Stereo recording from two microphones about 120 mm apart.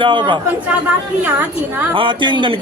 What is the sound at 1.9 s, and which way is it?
Speech, 45° right (ahead or behind).